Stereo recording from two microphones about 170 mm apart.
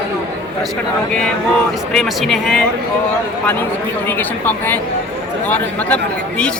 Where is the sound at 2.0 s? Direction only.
Centre (ahead or behind).